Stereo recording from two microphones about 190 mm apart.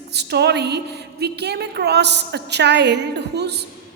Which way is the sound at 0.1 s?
60° right (ahead or behind).